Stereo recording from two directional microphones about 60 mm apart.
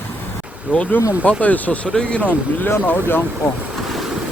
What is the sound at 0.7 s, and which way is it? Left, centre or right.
Speech, left.